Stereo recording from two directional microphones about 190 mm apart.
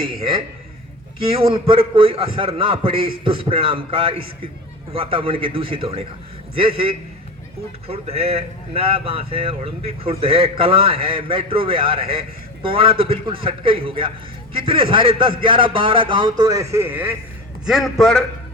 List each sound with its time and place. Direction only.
0.0 s a man's voice: 25° right (ahead or behind); by 18.3 s centre (ahead or behind)